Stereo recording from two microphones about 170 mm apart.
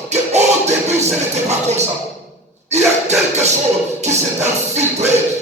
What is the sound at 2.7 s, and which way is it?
Music, 40° right (ahead or behind).